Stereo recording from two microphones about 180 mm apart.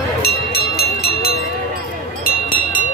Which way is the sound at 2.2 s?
55° left (ahead or behind).